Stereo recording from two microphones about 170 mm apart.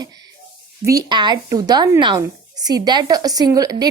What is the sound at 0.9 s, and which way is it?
A woman's voice, 25° right (ahead or behind).